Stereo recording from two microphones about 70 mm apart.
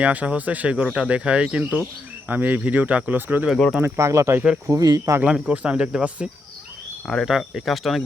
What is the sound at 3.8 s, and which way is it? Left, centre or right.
Speech, right.